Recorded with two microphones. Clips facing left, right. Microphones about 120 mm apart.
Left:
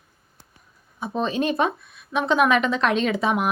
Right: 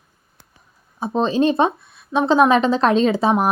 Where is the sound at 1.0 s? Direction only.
30° right (ahead or behind).